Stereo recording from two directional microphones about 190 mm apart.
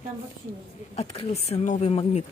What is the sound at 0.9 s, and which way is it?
Speech, 30° left (ahead or behind).